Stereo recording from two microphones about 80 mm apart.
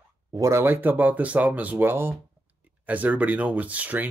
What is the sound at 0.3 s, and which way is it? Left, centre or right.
Speech, right.